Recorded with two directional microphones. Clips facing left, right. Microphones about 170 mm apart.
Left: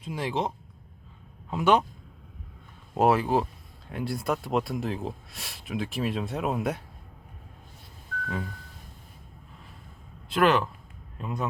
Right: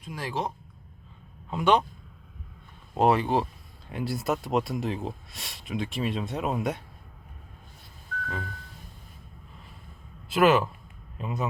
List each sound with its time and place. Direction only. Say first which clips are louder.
0.0 s speech: left 3 dB; 25° left (ahead or behind)
1.5 s a man's voice: even; 5° left (ahead or behind)
2.9 s speech: even; centre (ahead or behind)
10.2 s speech: right 2 dB; 5° right (ahead or behind)